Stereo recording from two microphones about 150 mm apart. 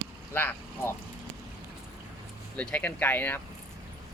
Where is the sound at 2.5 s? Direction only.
10° left (ahead or behind).